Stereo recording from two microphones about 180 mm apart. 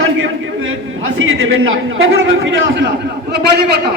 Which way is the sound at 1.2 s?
90° right.